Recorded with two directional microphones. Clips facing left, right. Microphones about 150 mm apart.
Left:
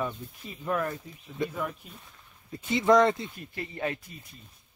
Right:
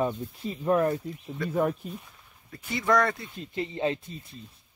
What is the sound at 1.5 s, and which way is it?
Speech, 45° right (ahead or behind).